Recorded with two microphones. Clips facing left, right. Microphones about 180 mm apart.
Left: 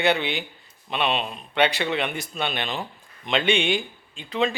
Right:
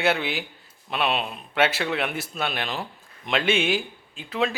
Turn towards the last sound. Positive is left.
turn(degrees=-5)  # may be behind; listen again after turning